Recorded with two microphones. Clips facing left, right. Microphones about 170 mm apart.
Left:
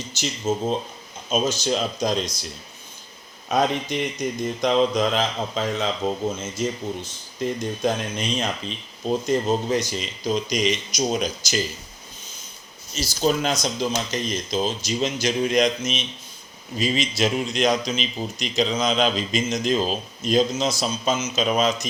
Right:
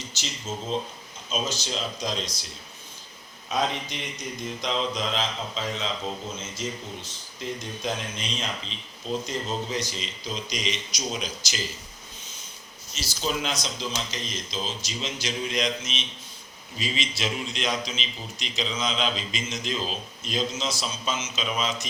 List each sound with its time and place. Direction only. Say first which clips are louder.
0.1 s speech: left 13 dB; 50° left (ahead or behind)
3.9 s speech: left 10 dB; 50° left (ahead or behind)
12.9 s speech: left 8 dB; 45° left (ahead or behind)